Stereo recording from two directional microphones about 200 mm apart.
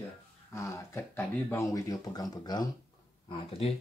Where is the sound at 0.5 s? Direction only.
15° left (ahead or behind).